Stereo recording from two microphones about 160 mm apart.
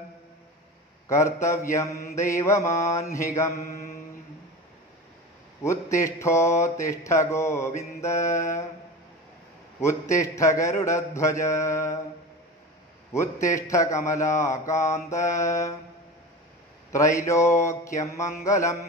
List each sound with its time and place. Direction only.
1.0 s mantra: 20° left (ahead or behind)
5.6 s mantra: 15° left (ahead or behind)
9.8 s mantra: 20° left (ahead or behind)
13.1 s mantra: 20° left (ahead or behind)
16.9 s mantra: 20° left (ahead or behind)